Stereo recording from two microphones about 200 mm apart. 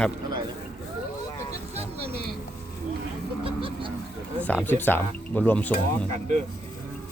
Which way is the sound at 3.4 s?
25° right (ahead or behind).